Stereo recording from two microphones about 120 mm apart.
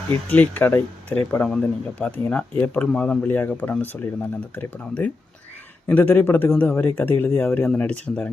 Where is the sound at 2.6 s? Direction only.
10° left (ahead or behind).